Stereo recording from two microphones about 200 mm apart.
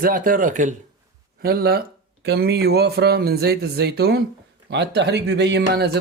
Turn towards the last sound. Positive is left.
turn(degrees=-55)  # may be behind; listen again after turning